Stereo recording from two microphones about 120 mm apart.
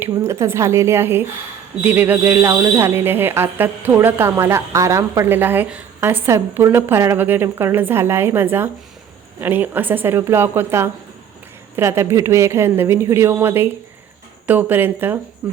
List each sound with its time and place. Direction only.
0.1 s a woman's voice: 25° right (ahead or behind)